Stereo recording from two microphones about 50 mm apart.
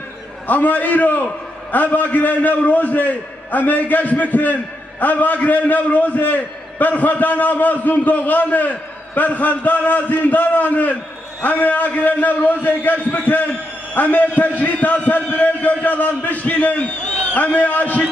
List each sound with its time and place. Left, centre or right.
0.5 s a man's voice: left